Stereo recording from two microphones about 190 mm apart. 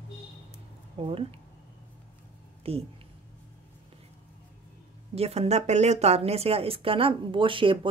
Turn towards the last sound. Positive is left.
turn(degrees=-25)  # may be behind; listen again after turning